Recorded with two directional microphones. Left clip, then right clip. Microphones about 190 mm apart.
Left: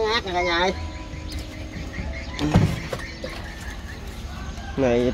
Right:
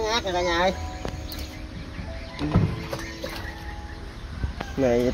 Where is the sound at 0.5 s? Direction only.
35° right (ahead or behind).